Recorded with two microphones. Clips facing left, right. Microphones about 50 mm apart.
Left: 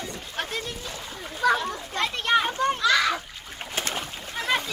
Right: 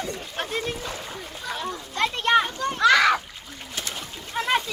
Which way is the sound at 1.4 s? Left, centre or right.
Left.